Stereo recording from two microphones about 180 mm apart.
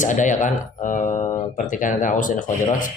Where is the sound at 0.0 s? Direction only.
45° left (ahead or behind).